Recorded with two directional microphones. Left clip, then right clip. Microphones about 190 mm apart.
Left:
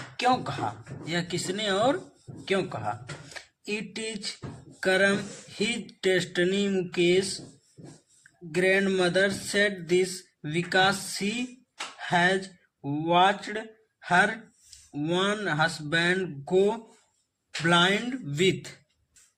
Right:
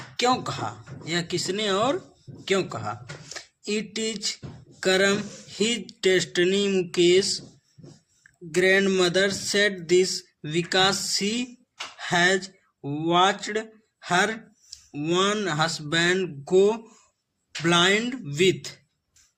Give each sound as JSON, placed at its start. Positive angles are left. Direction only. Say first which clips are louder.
{"t": 0.2, "sound": "speech", "louder": "right 2 dB", "side_deg": -30}
{"t": 8.5, "sound": "speech", "louder": "right 4 dB", "side_deg": -25}